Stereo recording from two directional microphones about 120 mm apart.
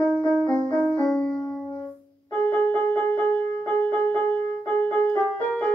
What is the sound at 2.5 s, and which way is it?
Music, 10° left (ahead or behind).